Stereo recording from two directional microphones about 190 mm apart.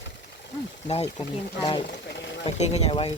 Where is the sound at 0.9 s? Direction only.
35° left (ahead or behind).